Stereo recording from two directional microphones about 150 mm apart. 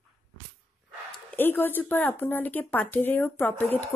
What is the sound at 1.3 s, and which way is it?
A woman's voice, 15° left (ahead or behind).